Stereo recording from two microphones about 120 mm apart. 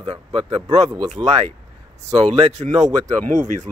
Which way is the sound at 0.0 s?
45° right (ahead or behind).